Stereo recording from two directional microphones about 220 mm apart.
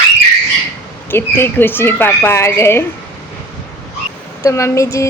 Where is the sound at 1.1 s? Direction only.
10° left (ahead or behind).